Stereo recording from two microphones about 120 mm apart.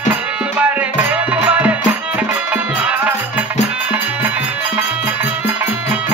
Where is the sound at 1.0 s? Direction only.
10° right (ahead or behind).